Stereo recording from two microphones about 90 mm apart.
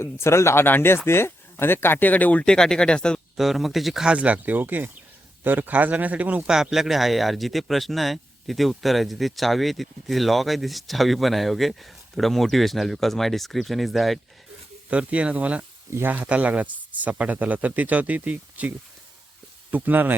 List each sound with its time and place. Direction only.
0.0 s speech: 30° left (ahead or behind); by 3.2 s 10° left (ahead or behind)
3.3 s speech: centre (ahead or behind)
6.6 s speech: 5° right (ahead or behind)
14.8 s speech: 15° right (ahead or behind)
15.9 s speech: 30° right (ahead or behind)
16.1 s speech: 15° right (ahead or behind)
19.7 s speech: 20° right (ahead or behind)